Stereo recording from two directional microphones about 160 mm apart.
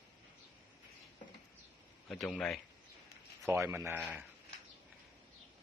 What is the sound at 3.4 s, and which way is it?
Speech, 15° right (ahead or behind).